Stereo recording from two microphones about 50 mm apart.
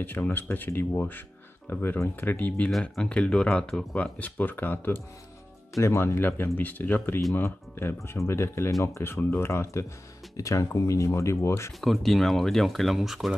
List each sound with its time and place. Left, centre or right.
0.0 s speech: left
2.8 s speech: left
5.8 s speech: left
7.3 s speech: left
10.3 s speech: left
11.8 s speech: centre